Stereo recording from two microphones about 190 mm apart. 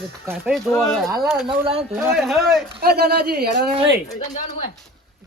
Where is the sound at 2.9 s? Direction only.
55° right (ahead or behind).